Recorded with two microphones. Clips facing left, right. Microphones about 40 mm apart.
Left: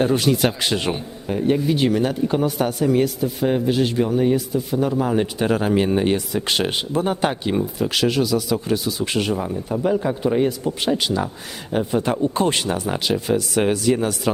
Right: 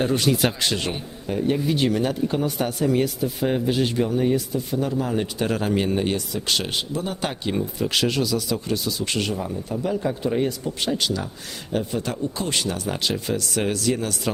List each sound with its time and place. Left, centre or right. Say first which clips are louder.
0.0 s a man's voice: left 3 dB; centre
0.7 s a man's voice: left 4 dB; centre
6.5 s speech: left 3 dB; left
7.2 s speech: left 5 dB; centre
12.1 s speech: left 7 dB; left
12.6 s speech: left 3 dB; centre